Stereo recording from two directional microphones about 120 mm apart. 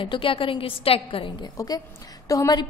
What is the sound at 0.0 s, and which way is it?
A woman's voice, 45° left (ahead or behind).